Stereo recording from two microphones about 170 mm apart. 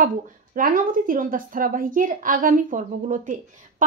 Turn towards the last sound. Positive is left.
turn(degrees=-50)  # may be behind; listen again after turning